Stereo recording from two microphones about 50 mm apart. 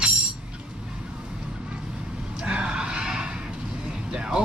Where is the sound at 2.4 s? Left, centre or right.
Centre.